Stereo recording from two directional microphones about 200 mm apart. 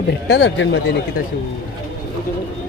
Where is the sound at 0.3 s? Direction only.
55° left (ahead or behind).